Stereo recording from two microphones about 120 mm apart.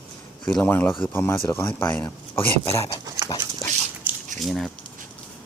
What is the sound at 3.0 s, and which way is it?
Dog, 30° right (ahead or behind).